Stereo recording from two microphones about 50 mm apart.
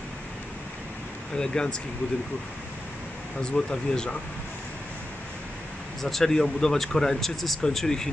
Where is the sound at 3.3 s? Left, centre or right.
Centre.